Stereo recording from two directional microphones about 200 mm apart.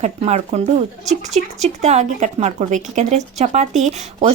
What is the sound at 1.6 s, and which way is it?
Speech, 35° right (ahead or behind).